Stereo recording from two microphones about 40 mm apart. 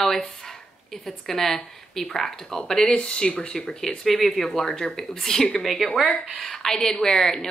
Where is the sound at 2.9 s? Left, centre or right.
Left.